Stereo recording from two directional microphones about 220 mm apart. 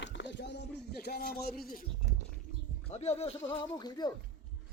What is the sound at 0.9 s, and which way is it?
Speech, 45° left (ahead or behind).